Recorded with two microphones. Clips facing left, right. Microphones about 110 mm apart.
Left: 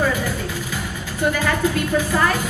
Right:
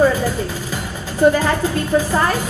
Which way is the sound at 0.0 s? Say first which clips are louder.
Right 6 dB; 35° right (ahead or behind).